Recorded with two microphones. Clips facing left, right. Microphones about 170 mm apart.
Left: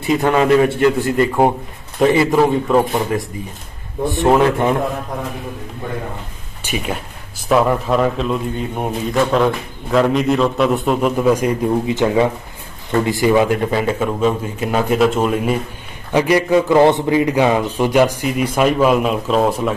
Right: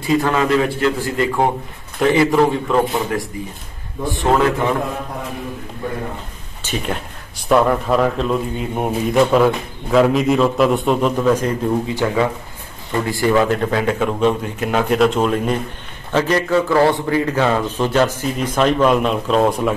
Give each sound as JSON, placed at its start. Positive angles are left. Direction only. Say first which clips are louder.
{"t": 0.0, "sound": "a man's voice", "louder": "left 2 dB", "side_deg": 20}
{"t": 2.3, "sound": "a man's voice", "louder": "left 2 dB", "side_deg": 5}
{"t": 4.0, "sound": "a man's voice", "louder": "left 3 dB", "side_deg": 25}
{"t": 6.6, "sound": "a man's voice", "louder": "even", "side_deg": 5}